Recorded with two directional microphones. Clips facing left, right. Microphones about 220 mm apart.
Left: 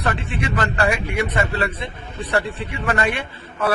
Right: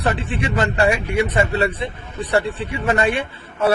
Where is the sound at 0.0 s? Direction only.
30° right (ahead or behind).